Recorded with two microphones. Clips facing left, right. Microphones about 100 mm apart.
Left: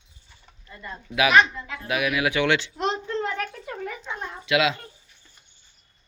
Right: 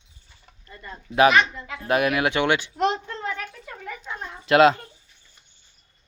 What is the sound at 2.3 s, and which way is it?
Speech, 25° right (ahead or behind).